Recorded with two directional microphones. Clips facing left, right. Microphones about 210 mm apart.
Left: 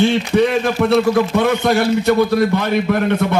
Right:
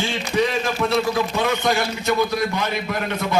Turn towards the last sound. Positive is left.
turn(degrees=60)  # may be behind; listen again after turning